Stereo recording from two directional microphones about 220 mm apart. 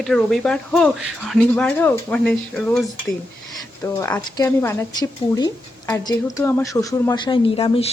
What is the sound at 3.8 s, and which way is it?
Speech, 15° left (ahead or behind).